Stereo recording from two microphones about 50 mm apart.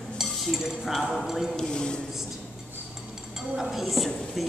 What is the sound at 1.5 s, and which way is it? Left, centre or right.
Speech, centre.